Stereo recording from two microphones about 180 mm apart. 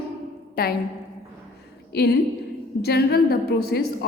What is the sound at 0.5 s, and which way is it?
Speech, 60° left (ahead or behind).